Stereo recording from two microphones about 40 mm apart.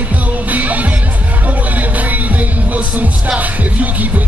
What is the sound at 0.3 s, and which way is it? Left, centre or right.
Music, right.